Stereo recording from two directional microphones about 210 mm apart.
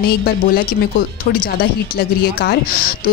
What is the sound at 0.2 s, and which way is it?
A woman's voice, 45° left (ahead or behind).